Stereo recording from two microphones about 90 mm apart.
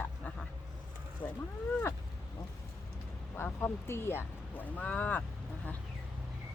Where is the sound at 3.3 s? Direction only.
25° left (ahead or behind).